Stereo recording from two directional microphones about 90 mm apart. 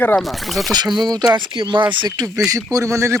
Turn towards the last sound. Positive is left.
turn(degrees=-35)  # may be behind; listen again after turning